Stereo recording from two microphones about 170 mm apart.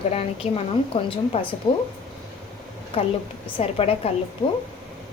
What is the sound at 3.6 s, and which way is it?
Speech, 35° left (ahead or behind).